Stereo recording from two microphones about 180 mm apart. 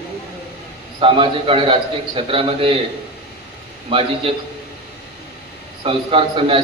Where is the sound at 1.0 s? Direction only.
30° right (ahead or behind).